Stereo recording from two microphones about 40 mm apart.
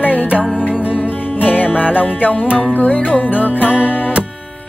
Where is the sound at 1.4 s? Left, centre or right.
Left.